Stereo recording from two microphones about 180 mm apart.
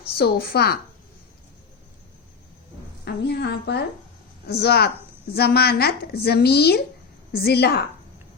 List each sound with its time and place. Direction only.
0.2 s speech: 60° left (ahead or behind)
3.0 s a woman's voice: 70° left (ahead or behind)